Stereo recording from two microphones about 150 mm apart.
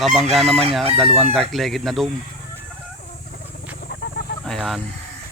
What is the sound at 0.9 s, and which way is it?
Speech, centre (ahead or behind).